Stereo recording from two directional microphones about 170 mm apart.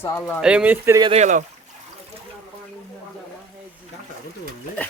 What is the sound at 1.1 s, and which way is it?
Speech, 45° right (ahead or behind).